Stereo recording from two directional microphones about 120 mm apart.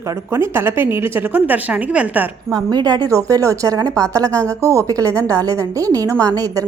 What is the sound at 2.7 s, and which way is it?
A woman's voice, 35° right (ahead or behind).